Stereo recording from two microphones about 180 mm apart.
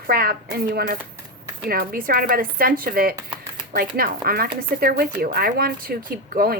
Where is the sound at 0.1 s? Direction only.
55° right (ahead or behind).